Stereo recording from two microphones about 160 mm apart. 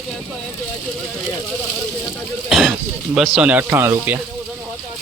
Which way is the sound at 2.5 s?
Centre (ahead or behind).